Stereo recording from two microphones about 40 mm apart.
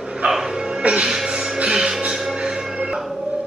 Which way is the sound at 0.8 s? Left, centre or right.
Right.